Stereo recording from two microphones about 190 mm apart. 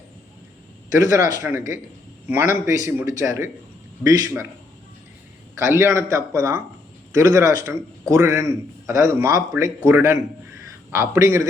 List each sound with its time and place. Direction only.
0.9 s a man's voice: 15° right (ahead or behind)
5.5 s a man's voice: 15° right (ahead or behind)